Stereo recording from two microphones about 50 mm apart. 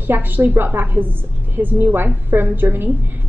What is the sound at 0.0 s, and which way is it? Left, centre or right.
A woman's voice, right.